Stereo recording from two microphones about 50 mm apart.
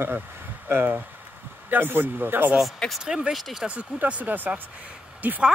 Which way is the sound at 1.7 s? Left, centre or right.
Right.